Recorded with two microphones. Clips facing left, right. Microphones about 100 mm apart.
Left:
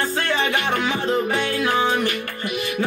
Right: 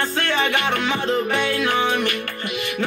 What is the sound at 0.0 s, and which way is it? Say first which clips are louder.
Music: even; 15° left (ahead or behind).